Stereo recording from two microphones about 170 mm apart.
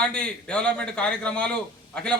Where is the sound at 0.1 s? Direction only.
5° left (ahead or behind).